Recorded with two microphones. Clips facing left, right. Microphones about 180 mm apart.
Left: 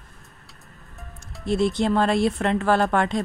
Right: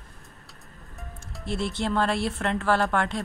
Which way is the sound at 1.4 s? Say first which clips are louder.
Left 7 dB; 15° left (ahead or behind).